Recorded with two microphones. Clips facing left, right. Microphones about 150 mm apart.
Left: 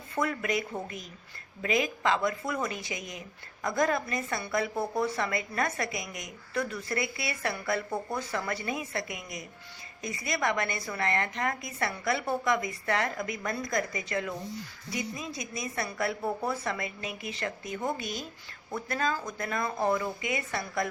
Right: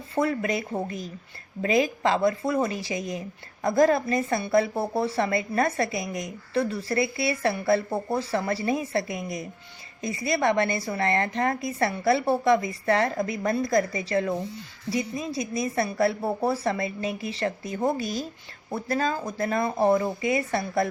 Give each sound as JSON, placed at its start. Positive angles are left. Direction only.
{"t": 0.2, "sound": "a woman's voice", "side_deg": -30}